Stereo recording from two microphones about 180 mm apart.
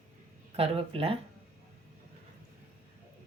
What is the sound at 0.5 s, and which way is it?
Speech, 30° right (ahead or behind).